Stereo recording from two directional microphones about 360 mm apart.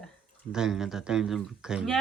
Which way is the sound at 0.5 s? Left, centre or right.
Centre.